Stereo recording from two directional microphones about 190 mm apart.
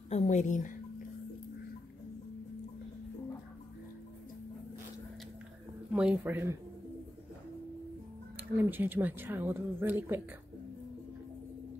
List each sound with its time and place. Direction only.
0.1 s a woman's voice: 40° left (ahead or behind)
5.9 s a woman's voice: 10° right (ahead or behind)
8.5 s a woman's voice: 10° right (ahead or behind)